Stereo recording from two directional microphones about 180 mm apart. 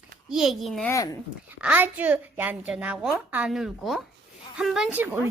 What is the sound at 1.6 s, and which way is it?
A woman's voice, 10° right (ahead or behind).